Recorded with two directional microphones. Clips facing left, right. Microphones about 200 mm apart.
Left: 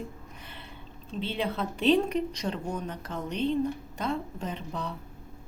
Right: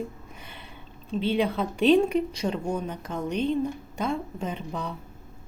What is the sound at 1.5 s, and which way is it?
A woman's voice, 10° right (ahead or behind).